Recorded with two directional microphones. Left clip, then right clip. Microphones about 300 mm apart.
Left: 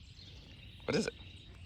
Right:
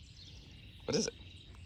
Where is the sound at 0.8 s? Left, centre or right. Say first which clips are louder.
Even; centre.